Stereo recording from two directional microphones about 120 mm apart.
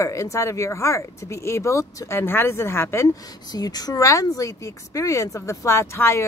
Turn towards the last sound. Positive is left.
turn(degrees=20)  # may be behind; listen again after turning